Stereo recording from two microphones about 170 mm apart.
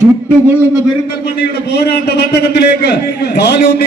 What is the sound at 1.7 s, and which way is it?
A man's voice, 70° left (ahead or behind).